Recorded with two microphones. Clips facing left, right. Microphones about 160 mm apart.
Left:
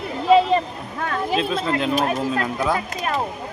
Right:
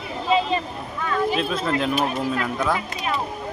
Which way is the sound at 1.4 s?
Centre (ahead or behind).